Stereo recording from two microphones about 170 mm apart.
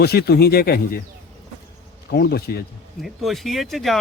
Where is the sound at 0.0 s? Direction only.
70° left (ahead or behind).